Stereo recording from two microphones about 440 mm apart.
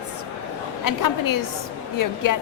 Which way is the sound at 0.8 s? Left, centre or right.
Left.